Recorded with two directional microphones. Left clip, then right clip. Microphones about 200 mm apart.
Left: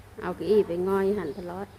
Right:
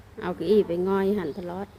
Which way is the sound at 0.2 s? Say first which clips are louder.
Right 1 dB; 15° right (ahead or behind).